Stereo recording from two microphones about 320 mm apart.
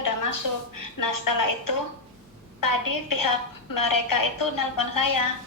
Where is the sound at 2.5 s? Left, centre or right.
Left.